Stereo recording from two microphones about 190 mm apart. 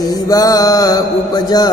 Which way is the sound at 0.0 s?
20° left (ahead or behind).